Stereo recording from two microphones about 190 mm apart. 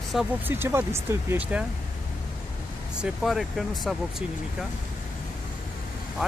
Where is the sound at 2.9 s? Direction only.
5° right (ahead or behind).